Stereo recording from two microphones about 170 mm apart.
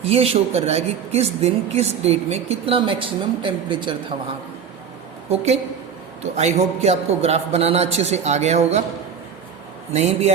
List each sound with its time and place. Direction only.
0.0 s speech: 35° right (ahead or behind)
5.3 s speech: 35° right (ahead or behind)
9.9 s speech: 40° right (ahead or behind)